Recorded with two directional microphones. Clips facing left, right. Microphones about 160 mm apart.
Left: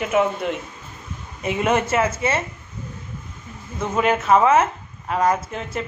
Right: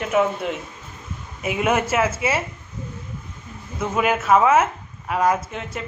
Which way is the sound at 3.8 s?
5° right (ahead or behind).